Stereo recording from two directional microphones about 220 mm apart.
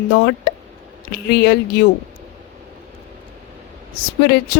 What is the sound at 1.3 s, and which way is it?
Speech, 45° left (ahead or behind).